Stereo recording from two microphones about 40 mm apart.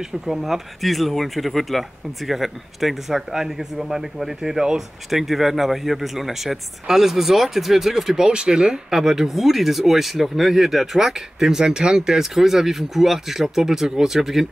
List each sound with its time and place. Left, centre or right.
0.0 s speech: centre
8.3 s speech: right
8.9 s speech: centre